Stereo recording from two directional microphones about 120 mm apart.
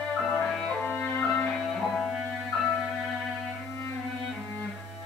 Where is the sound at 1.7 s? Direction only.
Centre (ahead or behind).